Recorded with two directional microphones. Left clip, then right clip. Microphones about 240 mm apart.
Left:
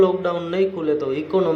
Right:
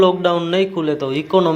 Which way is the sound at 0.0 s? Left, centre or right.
Right.